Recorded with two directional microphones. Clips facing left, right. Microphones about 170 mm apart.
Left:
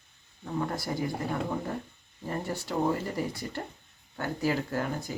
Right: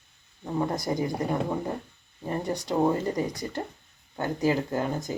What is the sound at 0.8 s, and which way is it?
Speech, 20° right (ahead or behind).